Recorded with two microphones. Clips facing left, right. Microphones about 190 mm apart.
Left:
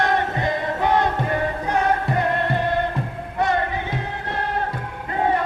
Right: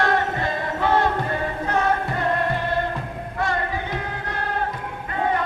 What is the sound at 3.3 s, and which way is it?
Music, 20° left (ahead or behind).